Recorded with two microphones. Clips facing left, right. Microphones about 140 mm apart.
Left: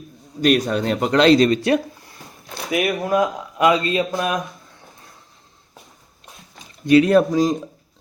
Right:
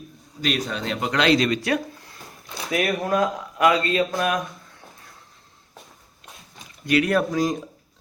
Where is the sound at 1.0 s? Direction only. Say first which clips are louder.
Left 6 dB; 35° left (ahead or behind).